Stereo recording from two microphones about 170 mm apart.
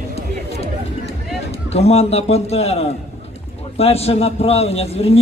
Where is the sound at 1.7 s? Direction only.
35° left (ahead or behind).